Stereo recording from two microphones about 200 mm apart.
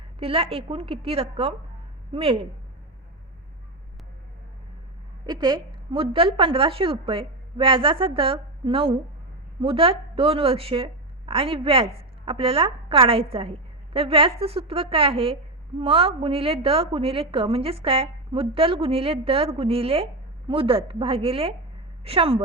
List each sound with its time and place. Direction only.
0.2 s a woman's voice: 30° right (ahead or behind)
5.2 s a woman's voice: 20° right (ahead or behind)